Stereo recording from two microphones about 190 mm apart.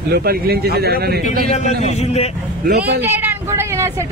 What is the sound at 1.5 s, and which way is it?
Speech, 35° left (ahead or behind).